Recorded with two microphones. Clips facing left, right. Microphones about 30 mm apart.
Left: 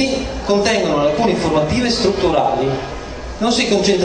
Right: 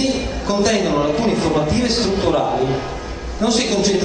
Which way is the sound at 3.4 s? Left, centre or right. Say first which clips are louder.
Left 2 dB; left.